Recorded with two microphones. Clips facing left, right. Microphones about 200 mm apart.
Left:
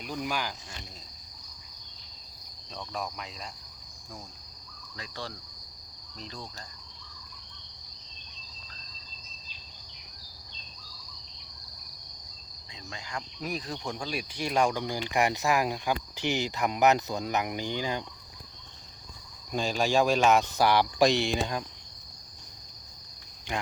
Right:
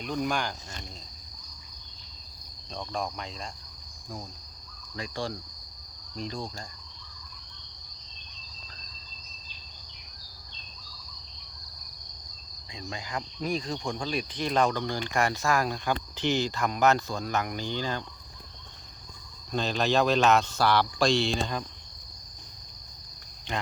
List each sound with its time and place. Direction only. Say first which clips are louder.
0.0 s speech: right 4 dB; 5° left (ahead or behind)
5.2 s cricket: right 6 dB; 50° right (ahead or behind)
12.7 s cricket: right 4 dB; 15° right (ahead or behind)
13.4 s speech: right 4 dB; 5° left (ahead or behind)
19.5 s speech: right 1 dB; 10° left (ahead or behind)
23.5 s speech: even; 10° left (ahead or behind)